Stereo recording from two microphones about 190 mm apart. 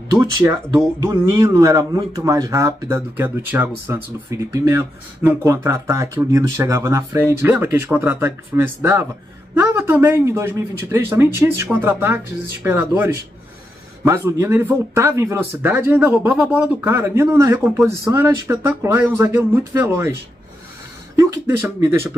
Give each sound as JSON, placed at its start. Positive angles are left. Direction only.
{"t": 0.2, "sound": "speech", "side_deg": -10}
{"t": 21.2, "sound": "speech", "side_deg": -15}